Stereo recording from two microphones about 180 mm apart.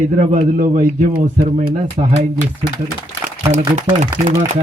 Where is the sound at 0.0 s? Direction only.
40° right (ahead or behind).